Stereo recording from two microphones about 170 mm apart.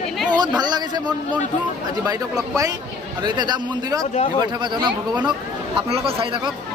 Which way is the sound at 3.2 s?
25° right (ahead or behind).